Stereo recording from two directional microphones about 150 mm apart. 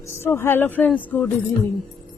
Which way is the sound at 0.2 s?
15° left (ahead or behind).